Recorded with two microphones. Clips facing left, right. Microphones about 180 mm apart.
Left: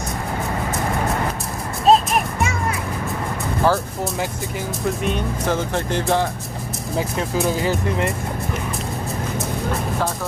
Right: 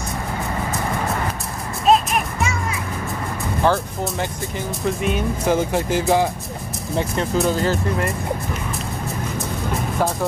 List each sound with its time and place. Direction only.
1.9 s music: 35° left (ahead or behind)
3.6 s speech: 5° left (ahead or behind)